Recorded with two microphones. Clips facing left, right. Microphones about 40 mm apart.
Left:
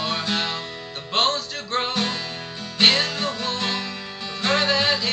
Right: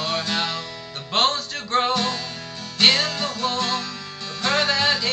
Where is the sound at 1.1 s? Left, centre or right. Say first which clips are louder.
Right 1 dB; centre.